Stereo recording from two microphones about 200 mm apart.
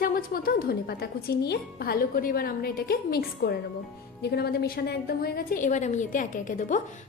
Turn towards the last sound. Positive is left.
turn(degrees=40)  # may be behind; listen again after turning